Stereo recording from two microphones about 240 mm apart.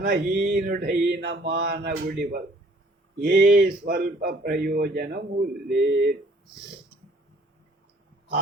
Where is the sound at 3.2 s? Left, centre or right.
Right.